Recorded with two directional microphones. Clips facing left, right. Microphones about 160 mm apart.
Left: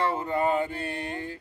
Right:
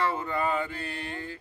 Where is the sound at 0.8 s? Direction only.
20° left (ahead or behind).